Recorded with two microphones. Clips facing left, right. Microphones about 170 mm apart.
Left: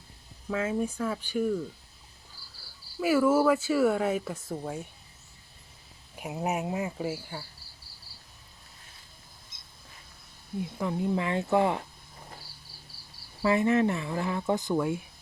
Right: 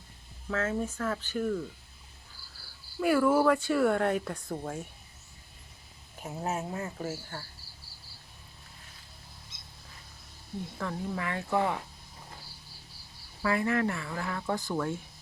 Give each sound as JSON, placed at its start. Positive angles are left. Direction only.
{"t": 0.5, "sound": "speech", "side_deg": 10}
{"t": 3.0, "sound": "speech", "side_deg": 5}
{"t": 6.1, "sound": "speech", "side_deg": 15}
{"t": 10.8, "sound": "speech", "side_deg": 15}
{"t": 13.4, "sound": "speech", "side_deg": 20}